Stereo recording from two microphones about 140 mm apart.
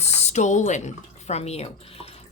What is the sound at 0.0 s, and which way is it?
Speech, 50° left (ahead or behind).